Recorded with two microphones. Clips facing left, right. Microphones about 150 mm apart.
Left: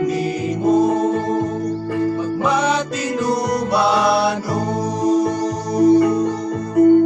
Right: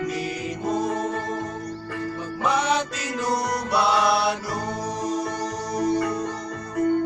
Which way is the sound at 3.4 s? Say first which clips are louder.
Left 5 dB; 25° left (ahead or behind).